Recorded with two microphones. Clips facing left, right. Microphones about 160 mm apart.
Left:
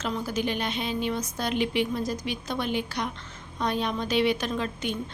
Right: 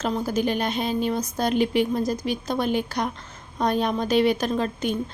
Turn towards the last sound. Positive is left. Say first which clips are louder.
# right 5 dB
turn(degrees=-40)  # may be behind; listen again after turning